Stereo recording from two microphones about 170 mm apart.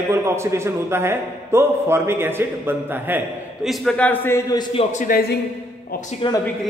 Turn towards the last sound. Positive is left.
turn(degrees=30)  # may be behind; listen again after turning